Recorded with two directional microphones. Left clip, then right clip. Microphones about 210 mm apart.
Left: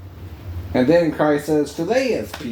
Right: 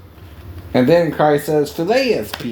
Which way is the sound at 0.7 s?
45° right (ahead or behind).